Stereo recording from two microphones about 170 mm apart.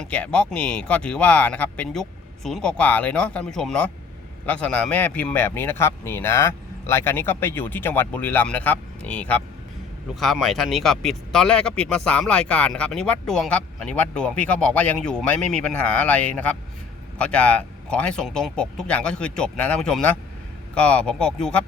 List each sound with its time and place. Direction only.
0.0 s a man's voice: 5° left (ahead or behind)